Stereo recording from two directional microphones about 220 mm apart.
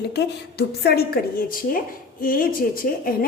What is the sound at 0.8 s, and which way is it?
A woman's voice, 45° left (ahead or behind).